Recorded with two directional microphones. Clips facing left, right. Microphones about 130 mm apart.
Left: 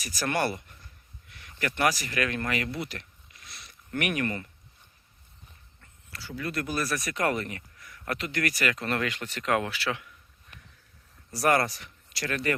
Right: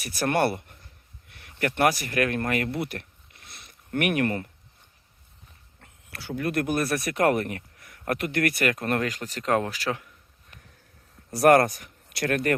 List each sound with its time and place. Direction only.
0.0 s speech: 60° right (ahead or behind)
2.7 s a sound: 60° right (ahead or behind)
5.8 s speech: 65° right (ahead or behind); by 10.1 s 40° right (ahead or behind)
11.3 s speech: 55° right (ahead or behind)